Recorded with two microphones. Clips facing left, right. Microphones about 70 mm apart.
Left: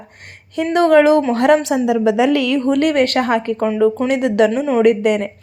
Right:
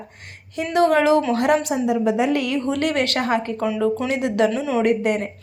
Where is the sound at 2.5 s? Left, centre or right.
Left.